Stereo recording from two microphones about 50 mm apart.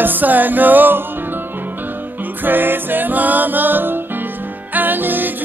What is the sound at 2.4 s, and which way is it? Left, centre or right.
Music, right.